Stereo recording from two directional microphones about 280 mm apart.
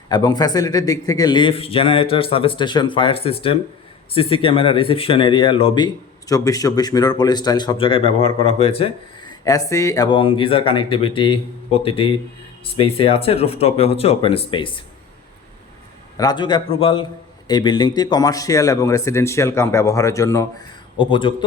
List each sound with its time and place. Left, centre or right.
0.1 s speech: centre
16.1 s speech: centre